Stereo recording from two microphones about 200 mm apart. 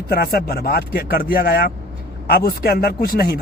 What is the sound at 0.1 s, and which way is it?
Speech, 50° left (ahead or behind).